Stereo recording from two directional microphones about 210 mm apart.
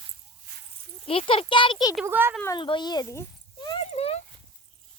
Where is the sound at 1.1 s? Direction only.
25° left (ahead or behind).